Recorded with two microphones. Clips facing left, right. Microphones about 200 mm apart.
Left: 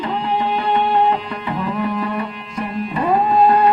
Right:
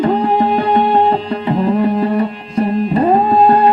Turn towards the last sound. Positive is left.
turn(degrees=-35)  # may be behind; listen again after turning